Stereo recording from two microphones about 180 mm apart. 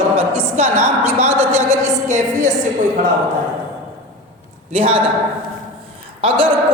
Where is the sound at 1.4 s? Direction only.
35° right (ahead or behind).